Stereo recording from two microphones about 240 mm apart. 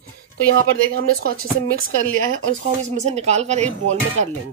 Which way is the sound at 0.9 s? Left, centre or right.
Right.